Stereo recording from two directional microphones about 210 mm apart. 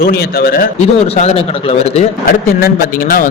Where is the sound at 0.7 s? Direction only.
30° left (ahead or behind).